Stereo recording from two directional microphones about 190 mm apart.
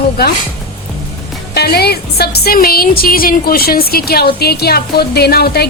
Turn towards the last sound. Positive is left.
turn(degrees=55)  # may be behind; listen again after turning